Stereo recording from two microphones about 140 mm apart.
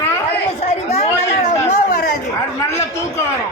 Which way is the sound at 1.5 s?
60° left (ahead or behind).